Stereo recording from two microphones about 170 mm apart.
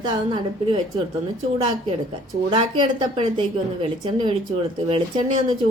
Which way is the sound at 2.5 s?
30° right (ahead or behind).